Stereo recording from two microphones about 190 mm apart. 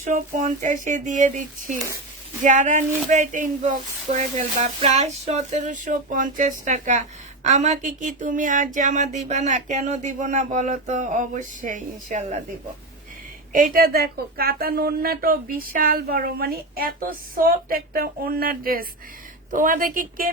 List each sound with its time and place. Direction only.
0.0 s speech: 40° right (ahead or behind)
13.5 s speech: 45° right (ahead or behind)